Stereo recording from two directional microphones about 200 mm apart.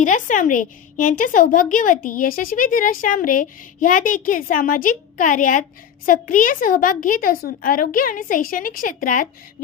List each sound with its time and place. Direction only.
0.0 s a woman's voice: 40° left (ahead or behind)